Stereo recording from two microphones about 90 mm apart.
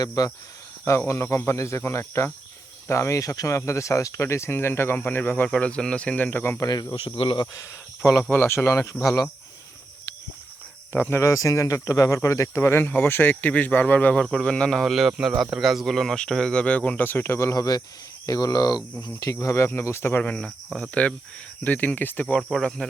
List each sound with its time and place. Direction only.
0.0 s speech: 40° left (ahead or behind); by 5.5 s 25° left (ahead or behind)
5.5 s speech: 10° left (ahead or behind)
6.6 s speech: 45° left (ahead or behind)
7.2 s speech: 70° left (ahead or behind)
7.5 s speech: 35° left (ahead or behind)
10.9 s a man's voice: 25° left (ahead or behind)
17.5 s speech: 45° left (ahead or behind); by 20.3 s 25° left (ahead or behind)
20.7 s a man's voice: centre (ahead or behind)
20.9 s speech: 15° left (ahead or behind)
22.4 s a man's voice: 5° left (ahead or behind)